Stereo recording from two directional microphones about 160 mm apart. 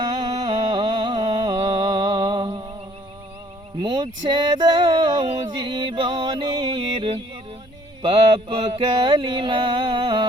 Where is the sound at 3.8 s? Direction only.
25° right (ahead or behind).